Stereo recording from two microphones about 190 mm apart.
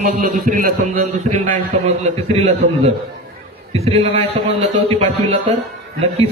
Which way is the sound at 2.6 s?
40° right (ahead or behind).